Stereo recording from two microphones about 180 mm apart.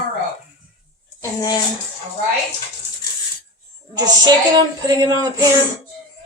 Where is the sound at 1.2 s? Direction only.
20° left (ahead or behind).